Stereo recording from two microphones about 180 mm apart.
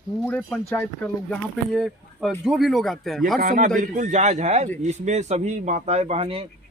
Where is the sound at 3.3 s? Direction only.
50° right (ahead or behind).